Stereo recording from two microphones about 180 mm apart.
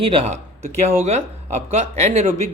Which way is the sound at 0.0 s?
30° right (ahead or behind).